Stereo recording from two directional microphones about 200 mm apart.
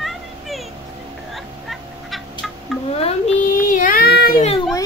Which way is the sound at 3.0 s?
35° left (ahead or behind).